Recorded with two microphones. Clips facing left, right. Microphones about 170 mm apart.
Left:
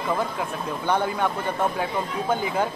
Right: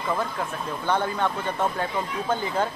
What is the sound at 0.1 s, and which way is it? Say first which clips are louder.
Speech: left 1 dB; 10° left (ahead or behind).